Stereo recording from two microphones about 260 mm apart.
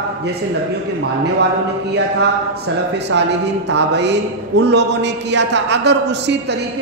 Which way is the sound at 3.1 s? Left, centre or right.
Right.